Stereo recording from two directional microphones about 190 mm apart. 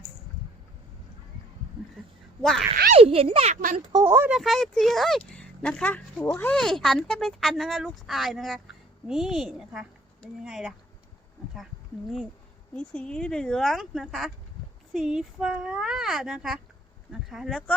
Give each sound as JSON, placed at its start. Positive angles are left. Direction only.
{"t": 2.4, "sound": "speech", "side_deg": 0}
{"t": 2.9, "sound": "a child's voice", "side_deg": -30}
{"t": 3.9, "sound": "speech", "side_deg": -15}
{"t": 4.4, "sound": "speech", "side_deg": 0}
{"t": 12.7, "sound": "speech", "side_deg": 5}